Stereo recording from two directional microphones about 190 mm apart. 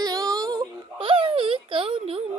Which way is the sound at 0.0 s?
20° right (ahead or behind).